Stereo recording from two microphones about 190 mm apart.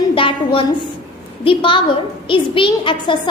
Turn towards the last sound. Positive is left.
turn(degrees=25)  # may be behind; listen again after turning